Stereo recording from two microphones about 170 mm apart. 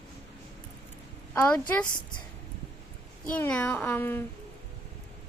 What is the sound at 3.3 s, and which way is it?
Speech, 10° left (ahead or behind).